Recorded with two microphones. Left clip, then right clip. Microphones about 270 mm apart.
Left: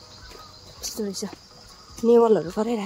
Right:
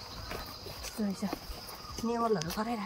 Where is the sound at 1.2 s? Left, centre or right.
Centre.